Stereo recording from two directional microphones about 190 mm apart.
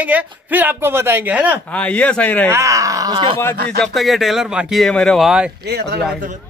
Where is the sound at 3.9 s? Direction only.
Centre (ahead or behind).